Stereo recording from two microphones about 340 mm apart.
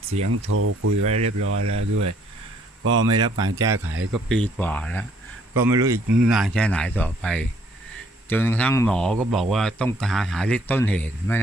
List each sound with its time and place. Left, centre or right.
0.2 s speech: right
1.0 s speech: centre
1.4 s speech: right
3.1 s speech: centre
3.8 s speech: right
4.1 s speech: centre
5.5 s speech: centre